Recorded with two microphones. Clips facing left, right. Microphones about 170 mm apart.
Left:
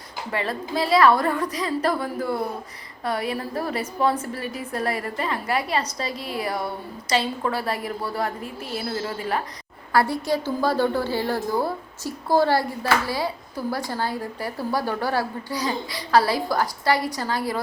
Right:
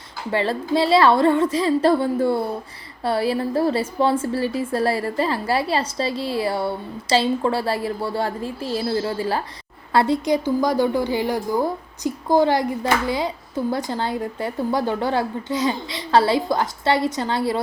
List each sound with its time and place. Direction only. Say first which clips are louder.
0.3 s a woman's voice: right 6 dB; 30° right (ahead or behind)